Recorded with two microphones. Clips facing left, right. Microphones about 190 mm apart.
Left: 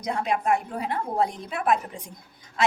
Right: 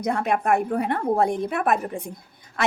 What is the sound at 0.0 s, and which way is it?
A woman's voice, 55° right (ahead or behind).